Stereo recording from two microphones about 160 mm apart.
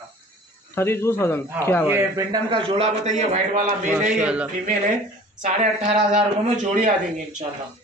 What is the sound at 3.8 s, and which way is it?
Speech, 5° right (ahead or behind).